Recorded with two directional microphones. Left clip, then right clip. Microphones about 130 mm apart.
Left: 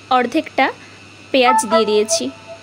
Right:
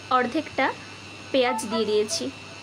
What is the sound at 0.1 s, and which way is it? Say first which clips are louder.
Speech: left 7 dB; 65° left (ahead or behind).